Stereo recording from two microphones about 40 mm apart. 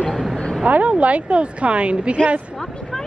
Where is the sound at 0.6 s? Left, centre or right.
Right.